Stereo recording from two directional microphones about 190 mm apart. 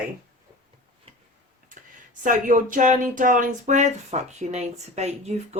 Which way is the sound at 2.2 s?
45° right (ahead or behind).